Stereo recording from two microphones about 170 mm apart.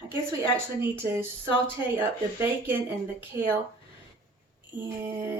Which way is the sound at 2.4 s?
10° right (ahead or behind).